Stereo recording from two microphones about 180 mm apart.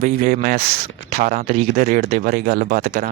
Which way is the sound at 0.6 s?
35° right (ahead or behind).